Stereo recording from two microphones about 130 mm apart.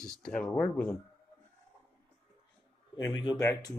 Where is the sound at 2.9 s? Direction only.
35° left (ahead or behind).